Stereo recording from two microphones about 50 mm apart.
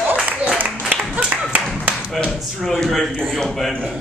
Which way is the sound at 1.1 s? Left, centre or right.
Right.